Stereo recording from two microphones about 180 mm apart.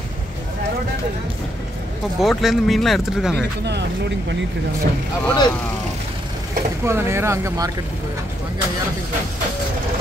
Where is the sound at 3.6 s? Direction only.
70° right (ahead or behind).